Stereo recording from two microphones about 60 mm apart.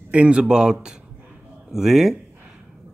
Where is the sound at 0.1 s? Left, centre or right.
Centre.